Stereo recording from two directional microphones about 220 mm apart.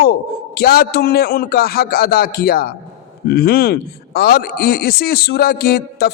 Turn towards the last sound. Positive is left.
turn(degrees=45)  # may be behind; listen again after turning